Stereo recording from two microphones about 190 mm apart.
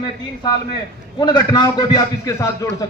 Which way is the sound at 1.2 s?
25° left (ahead or behind).